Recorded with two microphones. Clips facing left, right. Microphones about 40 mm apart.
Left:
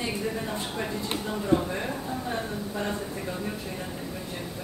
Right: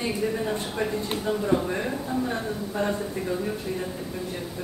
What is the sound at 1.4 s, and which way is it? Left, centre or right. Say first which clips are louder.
Speech: left 1 dB; centre.